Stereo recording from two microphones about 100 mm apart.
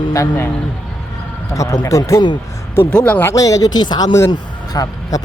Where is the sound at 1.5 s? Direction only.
35° left (ahead or behind).